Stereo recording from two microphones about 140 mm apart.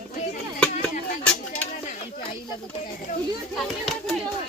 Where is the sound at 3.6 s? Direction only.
5° left (ahead or behind).